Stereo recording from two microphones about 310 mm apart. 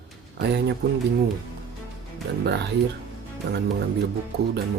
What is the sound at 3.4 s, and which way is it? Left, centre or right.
Speech, right.